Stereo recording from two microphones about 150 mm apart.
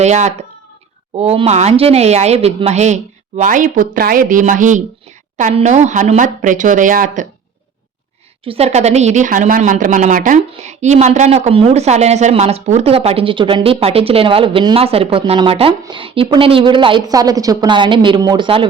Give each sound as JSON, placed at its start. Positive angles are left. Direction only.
{"t": 0.0, "sound": "speech", "side_deg": -50}
{"t": 8.4, "sound": "speech", "side_deg": -45}
{"t": 10.5, "sound": "a woman's voice", "side_deg": -50}